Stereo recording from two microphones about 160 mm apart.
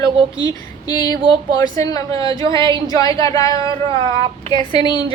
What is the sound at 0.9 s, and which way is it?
A woman's voice, 25° left (ahead or behind).